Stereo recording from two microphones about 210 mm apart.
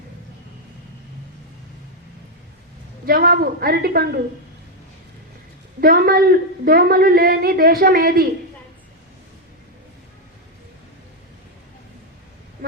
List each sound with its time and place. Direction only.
3.1 s a woman's voice: 45° right (ahead or behind)
5.8 s a woman's voice: 45° right (ahead or behind)